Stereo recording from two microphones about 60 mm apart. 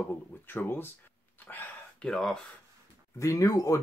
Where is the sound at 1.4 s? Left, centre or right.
Left.